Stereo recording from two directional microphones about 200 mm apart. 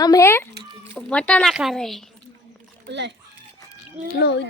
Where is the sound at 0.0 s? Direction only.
15° left (ahead or behind).